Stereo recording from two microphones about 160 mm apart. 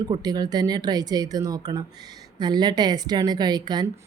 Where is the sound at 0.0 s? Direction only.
25° right (ahead or behind).